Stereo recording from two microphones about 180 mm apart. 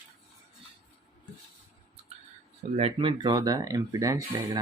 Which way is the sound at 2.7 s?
30° right (ahead or behind).